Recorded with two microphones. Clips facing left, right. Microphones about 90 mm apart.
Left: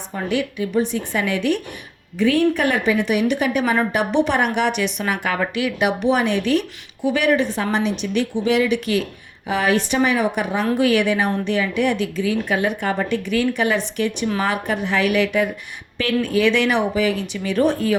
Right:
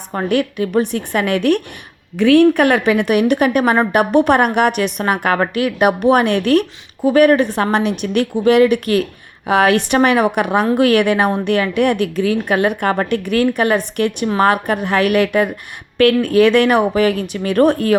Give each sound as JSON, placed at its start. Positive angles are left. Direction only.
{"t": 0.1, "sound": "a woman's voice", "side_deg": -55}
{"t": 9.5, "sound": "a woman's voice", "side_deg": -65}